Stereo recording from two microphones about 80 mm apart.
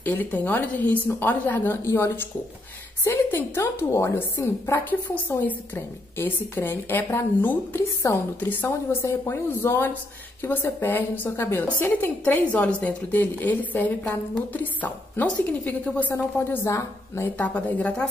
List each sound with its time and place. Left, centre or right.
0.0 s a woman's voice: left
8.6 s a woman's voice: left
16.6 s a woman's voice: left
17.4 s a woman's voice: centre